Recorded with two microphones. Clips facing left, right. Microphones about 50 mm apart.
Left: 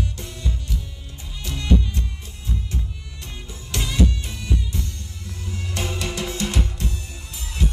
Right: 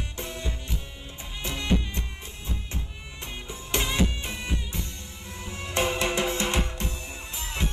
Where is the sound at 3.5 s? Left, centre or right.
Right.